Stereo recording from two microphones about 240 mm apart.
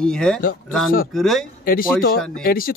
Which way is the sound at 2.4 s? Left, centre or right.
Left.